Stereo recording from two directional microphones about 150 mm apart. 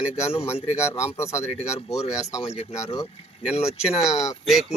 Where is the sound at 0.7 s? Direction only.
20° left (ahead or behind).